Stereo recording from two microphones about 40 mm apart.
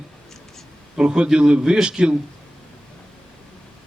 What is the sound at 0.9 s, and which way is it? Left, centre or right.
A man's voice, right.